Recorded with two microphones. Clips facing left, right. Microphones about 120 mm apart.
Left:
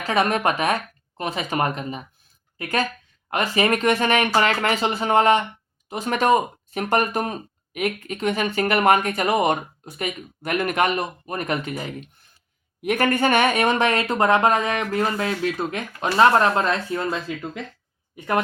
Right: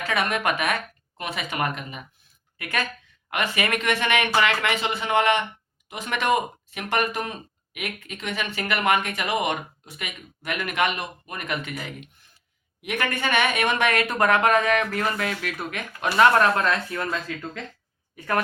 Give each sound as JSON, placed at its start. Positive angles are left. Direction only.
{"t": 0.1, "sound": "speech", "side_deg": 35}